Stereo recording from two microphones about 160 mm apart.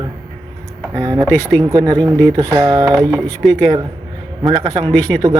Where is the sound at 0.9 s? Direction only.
20° right (ahead or behind).